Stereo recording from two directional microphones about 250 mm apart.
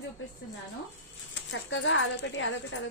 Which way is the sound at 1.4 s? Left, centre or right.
Left.